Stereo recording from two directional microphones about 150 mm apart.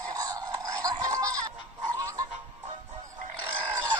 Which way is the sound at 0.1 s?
25° right (ahead or behind).